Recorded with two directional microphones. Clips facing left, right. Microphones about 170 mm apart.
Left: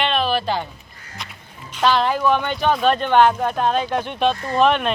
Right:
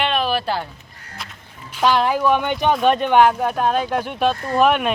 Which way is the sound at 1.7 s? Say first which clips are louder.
Right 1 dB; 10° right (ahead or behind).